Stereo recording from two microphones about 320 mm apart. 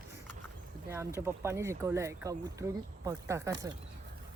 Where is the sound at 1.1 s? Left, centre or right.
Centre.